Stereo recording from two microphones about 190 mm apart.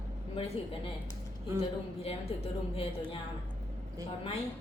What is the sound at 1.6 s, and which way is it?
A woman's voice, 30° left (ahead or behind).